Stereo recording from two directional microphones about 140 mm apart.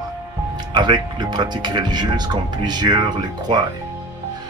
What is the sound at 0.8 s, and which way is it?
Speech, 35° right (ahead or behind).